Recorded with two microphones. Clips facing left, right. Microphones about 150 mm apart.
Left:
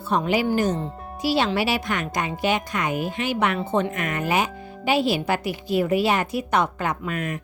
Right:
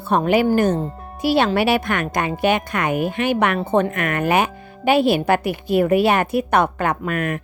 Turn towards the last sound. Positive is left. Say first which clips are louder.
# right 5 dB
turn(degrees=-60)  # may be behind; listen again after turning